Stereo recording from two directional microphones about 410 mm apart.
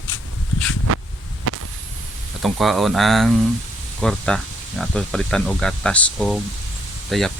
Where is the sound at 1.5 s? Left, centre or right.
Right.